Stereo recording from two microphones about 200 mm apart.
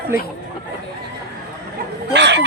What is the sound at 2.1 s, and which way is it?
Speech, 60° right (ahead or behind).